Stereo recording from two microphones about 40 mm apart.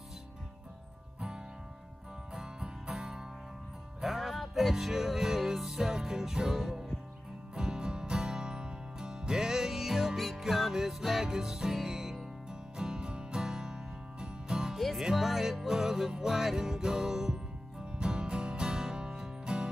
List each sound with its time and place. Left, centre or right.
2.3 s music: centre
10.1 s music: centre
10.4 s music: centre
14.8 s music: centre